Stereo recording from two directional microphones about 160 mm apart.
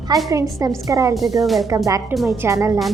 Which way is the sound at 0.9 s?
20° right (ahead or behind).